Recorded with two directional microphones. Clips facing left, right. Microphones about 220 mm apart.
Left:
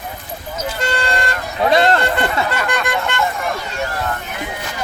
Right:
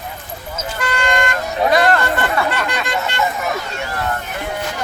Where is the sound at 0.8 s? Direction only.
30° left (ahead or behind).